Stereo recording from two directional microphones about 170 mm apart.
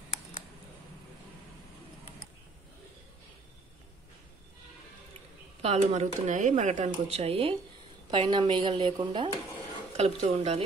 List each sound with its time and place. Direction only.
5.6 s speech: 40° right (ahead or behind)
10.3 s speech: 40° right (ahead or behind)